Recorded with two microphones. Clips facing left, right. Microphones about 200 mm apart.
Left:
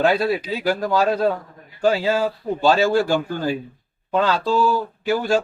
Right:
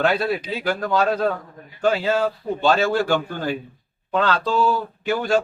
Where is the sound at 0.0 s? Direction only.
10° left (ahead or behind).